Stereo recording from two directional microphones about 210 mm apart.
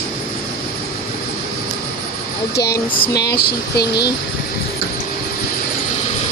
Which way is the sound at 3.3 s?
50° left (ahead or behind).